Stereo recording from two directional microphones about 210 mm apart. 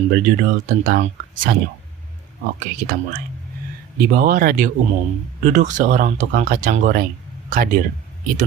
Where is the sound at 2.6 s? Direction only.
40° right (ahead or behind).